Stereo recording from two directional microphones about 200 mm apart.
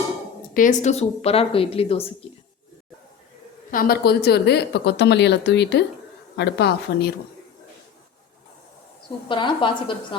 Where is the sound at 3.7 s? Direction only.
45° left (ahead or behind).